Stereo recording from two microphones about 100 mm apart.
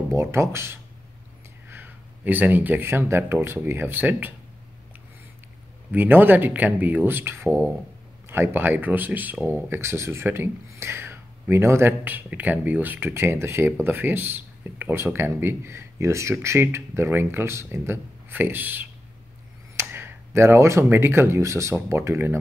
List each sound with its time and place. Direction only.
0.1 s speech: 25° right (ahead or behind)
5.9 s speech: 20° right (ahead or behind)